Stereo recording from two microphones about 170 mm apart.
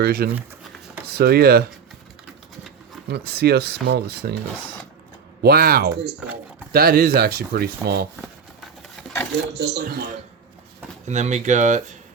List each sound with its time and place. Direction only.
0.0 s speech: 65° right (ahead or behind)
3.1 s speech: 70° right (ahead or behind)
5.4 s speech: 65° right (ahead or behind)
9.6 s speech: 55° right (ahead or behind)
11.0 s speech: 45° right (ahead or behind)